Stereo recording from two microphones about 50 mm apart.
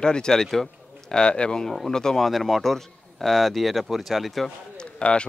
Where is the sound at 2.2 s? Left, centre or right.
Centre.